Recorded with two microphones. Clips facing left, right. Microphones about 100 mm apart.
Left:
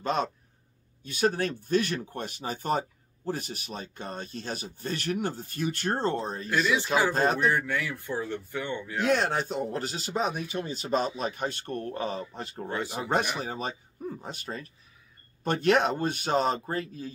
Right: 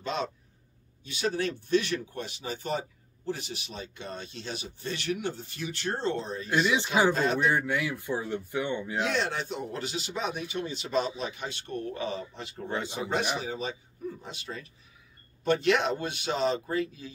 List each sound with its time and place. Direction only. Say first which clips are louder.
0.0 s speech: left 4 dB; 45° left (ahead or behind)
6.4 s speech: right 1 dB; 25° right (ahead or behind)
7.1 s speech: left 1 dB; 45° left (ahead or behind)
7.4 s speech: even; 15° right (ahead or behind)
9.0 s speech: left 7 dB; 45° left (ahead or behind)
12.6 s speech: even; 20° right (ahead or behind)
13.1 s speech: left 2 dB; 45° left (ahead or behind)